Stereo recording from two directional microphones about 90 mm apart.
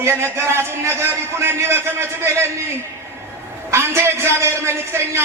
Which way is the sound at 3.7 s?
30° right (ahead or behind).